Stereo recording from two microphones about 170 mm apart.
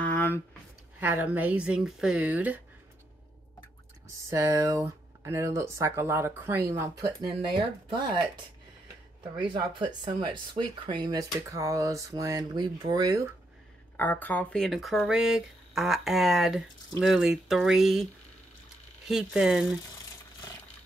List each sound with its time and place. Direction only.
0.0 s a sound: 10° left (ahead or behind)
0.9 s speech: 10° right (ahead or behind)
4.2 s speech: 20° right (ahead or behind)
9.4 s speech: 30° right (ahead or behind)
13.9 s speech: 10° left (ahead or behind)
19.0 s speech: centre (ahead or behind)